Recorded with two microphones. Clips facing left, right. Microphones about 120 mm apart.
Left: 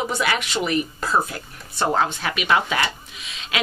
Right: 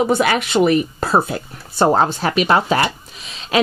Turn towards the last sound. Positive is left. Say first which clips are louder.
# right 9 dB
turn(degrees=-35)  # may be behind; listen again after turning